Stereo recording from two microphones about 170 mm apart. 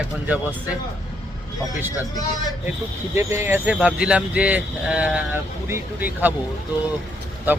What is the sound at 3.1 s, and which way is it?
Speech, 15° right (ahead or behind).